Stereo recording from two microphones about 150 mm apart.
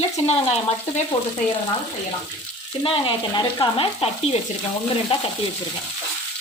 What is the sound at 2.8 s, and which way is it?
Stir, 35° left (ahead or behind).